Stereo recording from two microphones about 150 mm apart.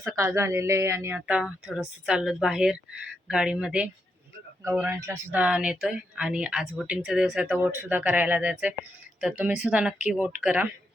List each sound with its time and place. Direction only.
0.2 s speech: 20° right (ahead or behind)
4.9 s speech: 20° right (ahead or behind)
5.4 s speech: 5° right (ahead or behind)